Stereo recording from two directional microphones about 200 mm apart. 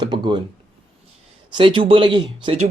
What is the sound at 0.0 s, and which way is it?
Speech, 20° right (ahead or behind).